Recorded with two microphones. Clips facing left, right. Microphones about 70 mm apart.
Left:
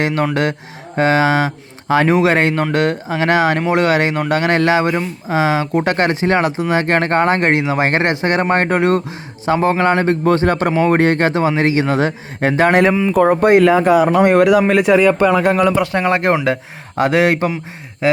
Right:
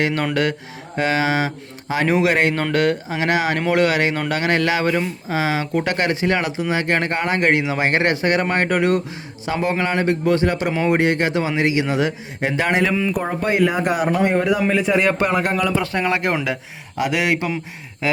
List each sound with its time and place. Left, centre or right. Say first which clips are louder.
0.0 s speech: left 3 dB; left
12.9 s speech: left 5 dB; left
13.2 s speech: left 11 dB; left
14.7 s a man's voice: left 6 dB; left
15.7 s speech: left 5 dB; left
18.0 s a sound: left 6 dB; left